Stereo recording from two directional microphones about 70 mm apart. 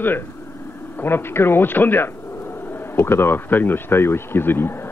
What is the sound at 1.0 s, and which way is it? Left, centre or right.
Speech, left.